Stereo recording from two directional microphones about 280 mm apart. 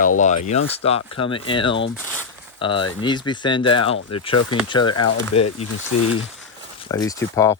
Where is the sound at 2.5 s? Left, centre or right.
Centre.